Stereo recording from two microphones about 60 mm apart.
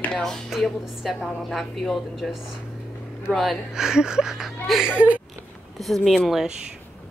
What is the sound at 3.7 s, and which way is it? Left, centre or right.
A woman's voice, centre.